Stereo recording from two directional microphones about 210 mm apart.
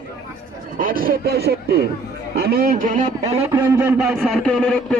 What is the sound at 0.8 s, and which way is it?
Speech, 40° right (ahead or behind).